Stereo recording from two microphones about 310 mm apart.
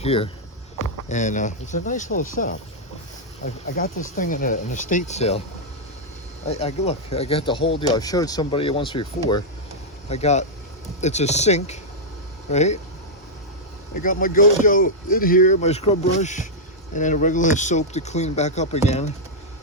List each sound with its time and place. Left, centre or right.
0.0 s speech: centre
6.4 s speech: left
13.9 s speech: left